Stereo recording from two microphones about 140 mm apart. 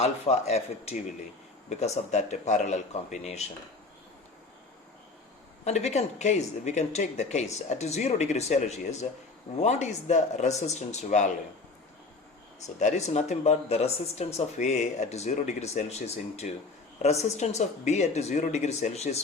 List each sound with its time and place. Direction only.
0.0 s speech: 50° left (ahead or behind)
5.6 s speech: 50° left (ahead or behind)
12.5 s speech: 55° left (ahead or behind)